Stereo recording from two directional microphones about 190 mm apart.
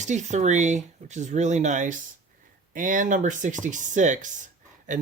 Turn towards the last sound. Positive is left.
turn(degrees=-40)  # may be behind; listen again after turning